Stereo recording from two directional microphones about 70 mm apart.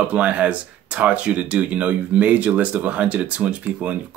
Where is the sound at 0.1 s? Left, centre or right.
Centre.